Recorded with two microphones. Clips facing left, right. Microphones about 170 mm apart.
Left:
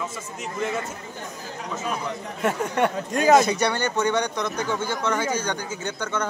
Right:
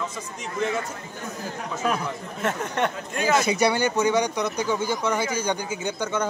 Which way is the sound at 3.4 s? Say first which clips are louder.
Right 2 dB; 10° right (ahead or behind).